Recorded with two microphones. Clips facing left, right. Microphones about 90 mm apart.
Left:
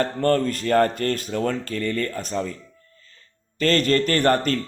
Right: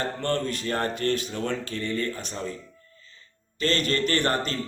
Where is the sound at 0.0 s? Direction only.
45° left (ahead or behind).